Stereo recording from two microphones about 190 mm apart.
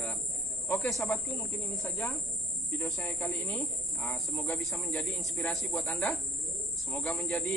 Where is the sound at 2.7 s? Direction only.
15° left (ahead or behind).